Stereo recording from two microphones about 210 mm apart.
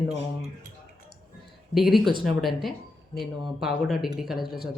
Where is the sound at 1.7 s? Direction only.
Centre (ahead or behind).